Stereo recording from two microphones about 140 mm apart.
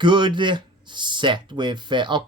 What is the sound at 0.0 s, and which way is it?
Speech, 35° right (ahead or behind).